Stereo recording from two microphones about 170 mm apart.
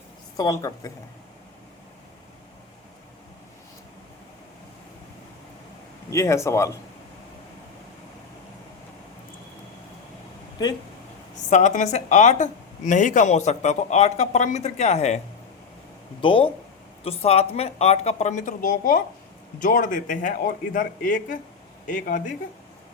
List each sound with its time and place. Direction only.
0.3 s a woman's voice: 20° left (ahead or behind)
6.1 s speech: 15° left (ahead or behind)
10.6 s a woman's voice: 25° left (ahead or behind)
11.4 s a woman's voice: 45° left (ahead or behind)
16.2 s a woman's voice: 30° left (ahead or behind); by 22.2 s 50° left (ahead or behind)